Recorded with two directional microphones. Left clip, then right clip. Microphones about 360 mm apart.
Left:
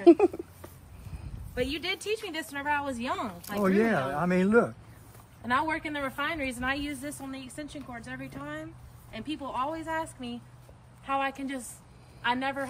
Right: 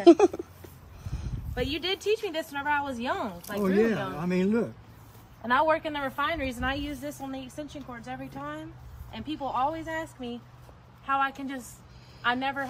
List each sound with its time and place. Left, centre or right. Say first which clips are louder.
0.1 s a sound: right 2 dB; centre
1.5 s a woman's voice: right 1 dB; centre
3.6 s speech: even; left
5.4 s a woman's voice: right 4 dB; centre